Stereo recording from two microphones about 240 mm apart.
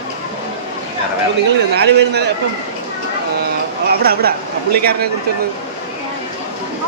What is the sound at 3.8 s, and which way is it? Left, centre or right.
Speech, right.